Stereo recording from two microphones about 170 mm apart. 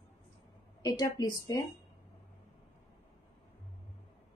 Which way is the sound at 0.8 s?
25° left (ahead or behind).